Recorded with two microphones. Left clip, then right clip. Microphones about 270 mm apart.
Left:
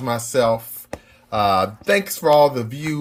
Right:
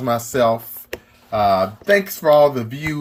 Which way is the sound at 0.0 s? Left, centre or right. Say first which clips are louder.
Right 2 dB; centre.